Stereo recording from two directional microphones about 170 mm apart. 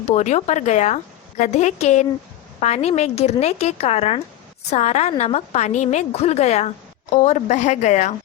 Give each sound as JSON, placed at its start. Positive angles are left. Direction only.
{"t": 0.1, "sound": "a woman's voice", "side_deg": 40}